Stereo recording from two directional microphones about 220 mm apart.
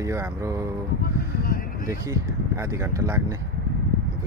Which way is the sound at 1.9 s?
15° right (ahead or behind).